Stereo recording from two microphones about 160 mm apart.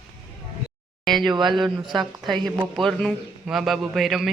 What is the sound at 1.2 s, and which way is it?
Speech, 30° right (ahead or behind).